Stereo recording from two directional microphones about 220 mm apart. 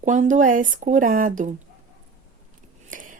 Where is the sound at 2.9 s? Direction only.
35° right (ahead or behind).